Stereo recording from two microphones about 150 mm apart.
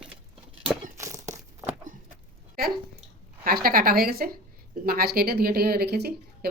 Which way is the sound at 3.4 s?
75° right (ahead or behind).